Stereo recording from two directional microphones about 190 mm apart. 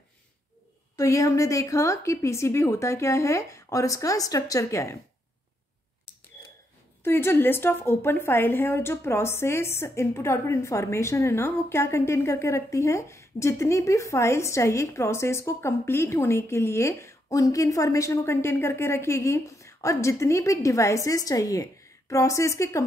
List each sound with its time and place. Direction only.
0.9 s a woman's voice: 15° left (ahead or behind)
7.0 s a woman's voice: 10° left (ahead or behind)